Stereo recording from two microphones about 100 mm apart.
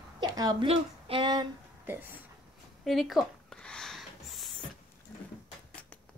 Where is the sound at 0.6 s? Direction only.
80° right.